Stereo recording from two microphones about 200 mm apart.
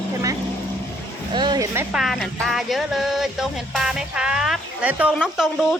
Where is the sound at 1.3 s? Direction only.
20° right (ahead or behind).